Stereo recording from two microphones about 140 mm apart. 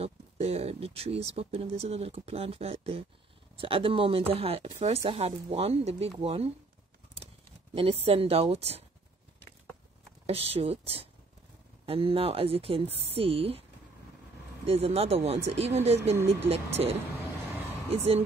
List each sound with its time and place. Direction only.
0.0 s speech: 50° right (ahead or behind)
7.7 s speech: 45° right (ahead or behind)
10.2 s speech: 45° right (ahead or behind)
14.7 s speech: 45° right (ahead or behind)